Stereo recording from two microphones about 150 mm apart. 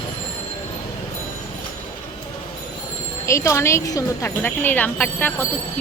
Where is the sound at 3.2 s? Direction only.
20° left (ahead or behind).